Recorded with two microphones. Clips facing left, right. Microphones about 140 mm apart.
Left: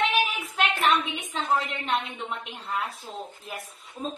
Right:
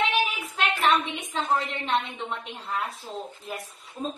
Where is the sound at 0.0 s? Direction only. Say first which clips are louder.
Even; centre (ahead or behind).